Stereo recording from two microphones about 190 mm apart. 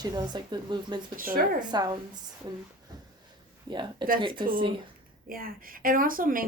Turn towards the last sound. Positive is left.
turn(degrees=-45)  # may be behind; listen again after turning